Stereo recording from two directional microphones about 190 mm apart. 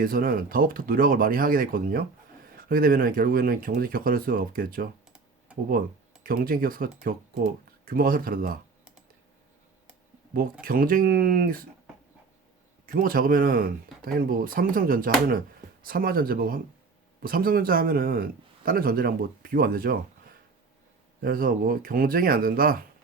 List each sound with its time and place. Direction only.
0.0 s a man's voice: 50° right (ahead or behind)
6.2 s a man's voice: 50° right (ahead or behind)
10.6 s a man's voice: 50° right (ahead or behind)
12.8 s a man's voice: 50° right (ahead or behind)